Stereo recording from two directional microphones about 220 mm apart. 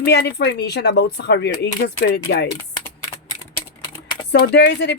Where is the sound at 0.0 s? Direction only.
50° left (ahead or behind).